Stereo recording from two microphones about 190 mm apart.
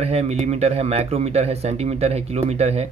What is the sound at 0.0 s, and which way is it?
Speech, 35° right (ahead or behind).